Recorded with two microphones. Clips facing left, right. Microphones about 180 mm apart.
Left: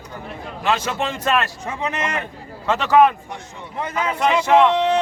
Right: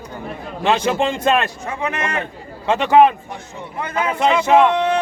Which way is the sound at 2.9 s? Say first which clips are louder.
Right 2 dB; 30° right (ahead or behind).